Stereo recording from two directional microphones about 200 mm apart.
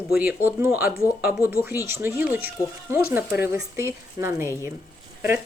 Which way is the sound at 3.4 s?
10° right (ahead or behind).